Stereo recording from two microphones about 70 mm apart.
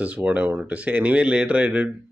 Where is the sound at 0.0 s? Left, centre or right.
Right.